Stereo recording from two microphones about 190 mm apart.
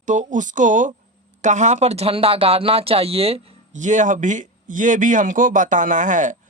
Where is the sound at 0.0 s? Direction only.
40° right (ahead or behind).